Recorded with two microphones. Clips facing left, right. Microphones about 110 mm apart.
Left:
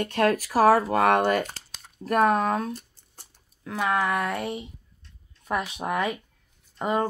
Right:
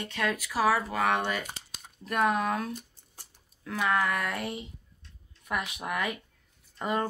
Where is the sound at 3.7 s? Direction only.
25° left (ahead or behind).